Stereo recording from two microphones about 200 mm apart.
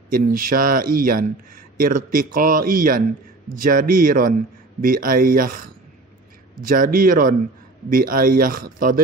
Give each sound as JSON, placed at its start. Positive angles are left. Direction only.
{"t": 0.1, "sound": "speech", "side_deg": -45}
{"t": 6.6, "sound": "speech", "side_deg": -45}